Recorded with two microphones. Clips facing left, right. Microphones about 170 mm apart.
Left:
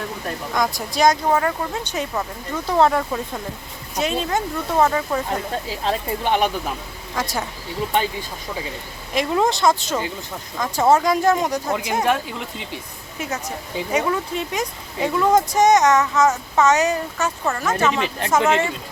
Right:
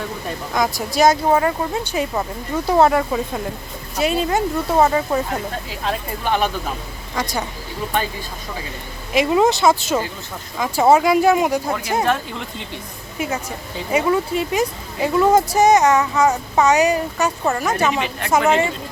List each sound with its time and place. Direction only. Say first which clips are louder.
0.5 s speech: right 3 dB; 5° right (ahead or behind)
5.8 s speech: even; 25° left (ahead or behind)
7.2 s speech: right 1 dB; centre (ahead or behind)
9.1 s speech: right 4 dB; 5° right (ahead or behind)
11.7 s speech: right 1 dB; 15° left (ahead or behind)
13.9 s speech: right 4 dB; 5° right (ahead or behind)